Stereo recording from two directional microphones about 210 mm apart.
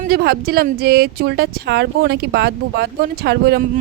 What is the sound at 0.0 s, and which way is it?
Speech, 45° right (ahead or behind).